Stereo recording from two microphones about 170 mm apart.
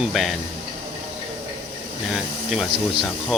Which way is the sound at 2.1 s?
5° right (ahead or behind).